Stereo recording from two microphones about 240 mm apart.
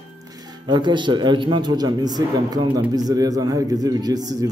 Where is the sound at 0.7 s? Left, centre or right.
Centre.